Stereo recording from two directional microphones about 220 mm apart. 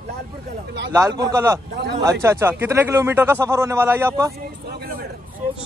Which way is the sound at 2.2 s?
10° right (ahead or behind).